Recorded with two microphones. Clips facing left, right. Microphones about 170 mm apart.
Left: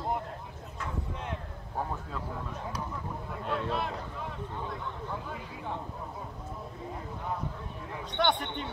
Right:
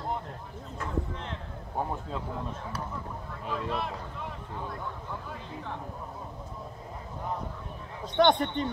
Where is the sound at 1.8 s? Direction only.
20° right (ahead or behind).